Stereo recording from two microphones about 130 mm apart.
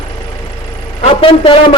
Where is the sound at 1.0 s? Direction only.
45° left (ahead or behind).